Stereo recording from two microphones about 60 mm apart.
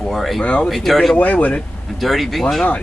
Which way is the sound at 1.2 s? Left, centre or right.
Left.